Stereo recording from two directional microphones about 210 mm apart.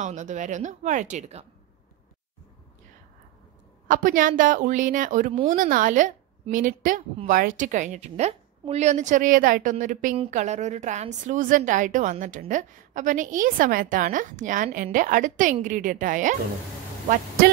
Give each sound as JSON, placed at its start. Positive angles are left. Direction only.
{"t": 0.0, "sound": "a woman's voice", "side_deg": -35}
{"t": 3.8, "sound": "a woman's voice", "side_deg": -40}